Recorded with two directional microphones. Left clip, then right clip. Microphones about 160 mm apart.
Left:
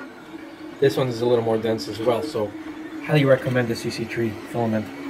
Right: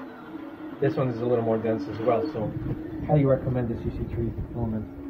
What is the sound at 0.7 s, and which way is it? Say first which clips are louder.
Speech: left 6 dB; 35° left (ahead or behind).